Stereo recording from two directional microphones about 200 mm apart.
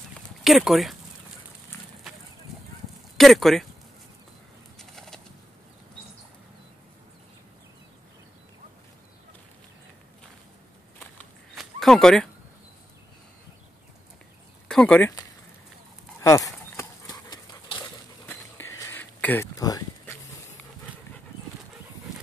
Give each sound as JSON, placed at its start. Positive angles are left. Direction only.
{"t": 0.4, "sound": "speech", "side_deg": 0}
{"t": 3.2, "sound": "speech", "side_deg": 0}
{"t": 4.7, "sound": "bird", "side_deg": 0}
{"t": 11.5, "sound": "a sound", "side_deg": 0}
{"t": 14.7, "sound": "speech", "side_deg": 5}
{"t": 16.2, "sound": "dog", "side_deg": 15}
{"t": 18.3, "sound": "a sound", "side_deg": 15}